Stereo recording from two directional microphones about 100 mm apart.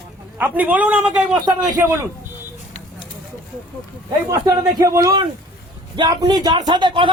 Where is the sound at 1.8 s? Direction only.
25° right (ahead or behind).